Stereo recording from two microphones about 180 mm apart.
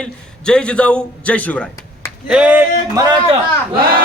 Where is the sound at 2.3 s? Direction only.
5° right (ahead or behind).